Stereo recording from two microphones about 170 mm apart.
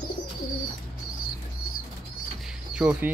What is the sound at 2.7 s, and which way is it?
Speech, 5° right (ahead or behind).